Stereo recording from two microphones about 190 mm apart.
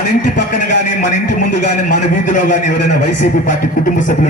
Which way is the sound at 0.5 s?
40° left (ahead or behind).